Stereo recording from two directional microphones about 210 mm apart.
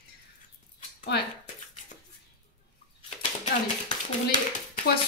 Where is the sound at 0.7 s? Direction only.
50° left (ahead or behind).